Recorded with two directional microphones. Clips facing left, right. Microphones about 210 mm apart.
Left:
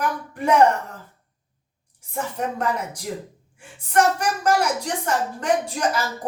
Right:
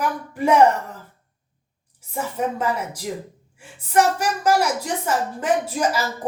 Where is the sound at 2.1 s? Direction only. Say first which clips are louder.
Right 2 dB; 10° right (ahead or behind).